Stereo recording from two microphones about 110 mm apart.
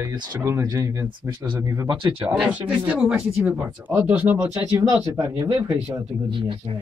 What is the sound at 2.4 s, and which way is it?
Speech, 10° right (ahead or behind).